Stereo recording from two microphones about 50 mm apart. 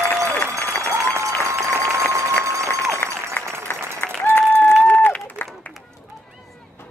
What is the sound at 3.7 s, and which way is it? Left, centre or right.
Applause, left.